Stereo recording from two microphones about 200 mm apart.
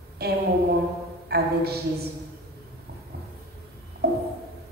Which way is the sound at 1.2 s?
50° right (ahead or behind).